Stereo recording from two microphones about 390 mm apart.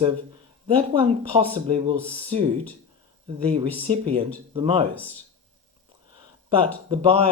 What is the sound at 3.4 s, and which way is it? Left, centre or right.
Speech, centre.